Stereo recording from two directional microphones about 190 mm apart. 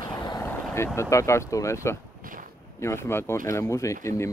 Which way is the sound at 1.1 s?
15° left (ahead or behind).